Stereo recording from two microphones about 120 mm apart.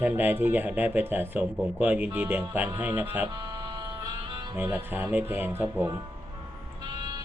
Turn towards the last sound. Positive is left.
turn(degrees=-40)  # may be behind; listen again after turning